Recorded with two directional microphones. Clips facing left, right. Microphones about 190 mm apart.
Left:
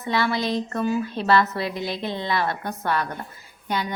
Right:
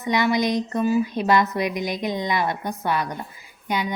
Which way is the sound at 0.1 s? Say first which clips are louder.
Right 3 dB; 15° right (ahead or behind).